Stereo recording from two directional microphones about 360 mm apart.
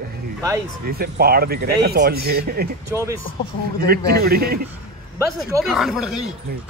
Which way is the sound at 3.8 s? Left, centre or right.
Right.